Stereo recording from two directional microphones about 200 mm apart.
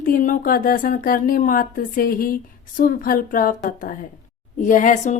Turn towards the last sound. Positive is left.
turn(degrees=40)  # may be behind; listen again after turning